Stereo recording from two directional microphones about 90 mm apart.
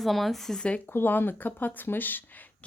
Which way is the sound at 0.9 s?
20° left (ahead or behind).